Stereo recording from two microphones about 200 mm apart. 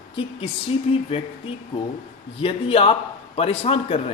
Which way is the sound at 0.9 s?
30° left (ahead or behind).